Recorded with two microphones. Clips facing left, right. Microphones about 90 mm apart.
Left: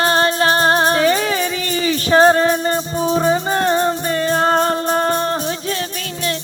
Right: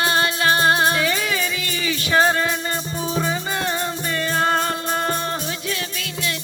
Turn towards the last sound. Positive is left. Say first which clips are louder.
# left 5 dB
turn(degrees=40)  # may be behind; listen again after turning